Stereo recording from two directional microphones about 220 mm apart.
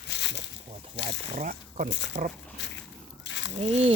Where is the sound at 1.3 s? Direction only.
35° right (ahead or behind).